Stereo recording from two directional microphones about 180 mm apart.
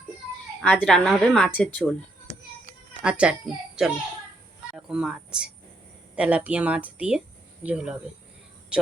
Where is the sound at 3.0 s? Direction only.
5° right (ahead or behind).